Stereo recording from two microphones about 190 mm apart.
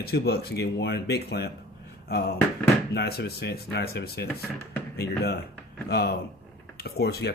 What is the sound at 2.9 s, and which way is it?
Speech, 60° left (ahead or behind).